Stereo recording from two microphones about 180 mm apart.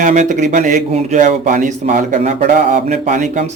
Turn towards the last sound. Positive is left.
turn(degrees=-45)  # may be behind; listen again after turning